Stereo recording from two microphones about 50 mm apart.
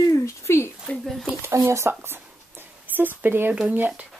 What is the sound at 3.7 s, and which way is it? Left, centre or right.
Speech, right.